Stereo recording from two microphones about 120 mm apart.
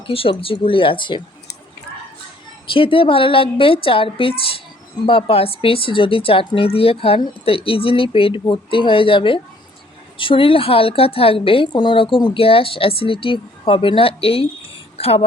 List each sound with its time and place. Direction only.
0.1 s a woman's voice: 50° left (ahead or behind)
2.7 s a woman's voice: 50° left (ahead or behind)
14.9 s a sound: 55° left (ahead or behind)